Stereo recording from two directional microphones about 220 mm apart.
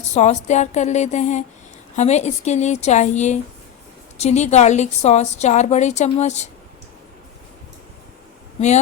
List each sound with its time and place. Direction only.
0.0 s a woman's voice: 30° left (ahead or behind)